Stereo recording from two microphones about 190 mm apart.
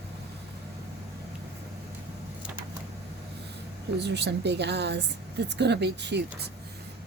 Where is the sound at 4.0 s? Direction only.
65° right (ahead or behind).